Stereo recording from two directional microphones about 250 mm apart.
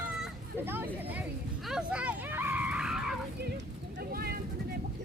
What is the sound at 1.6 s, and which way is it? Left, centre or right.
Screaming, centre.